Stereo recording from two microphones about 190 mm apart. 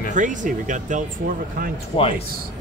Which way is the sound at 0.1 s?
40° right (ahead or behind).